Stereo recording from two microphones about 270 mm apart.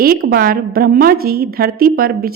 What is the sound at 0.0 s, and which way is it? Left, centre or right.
A woman's voice, right.